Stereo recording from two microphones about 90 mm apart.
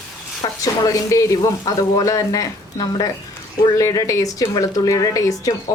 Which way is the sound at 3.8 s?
35° left (ahead or behind).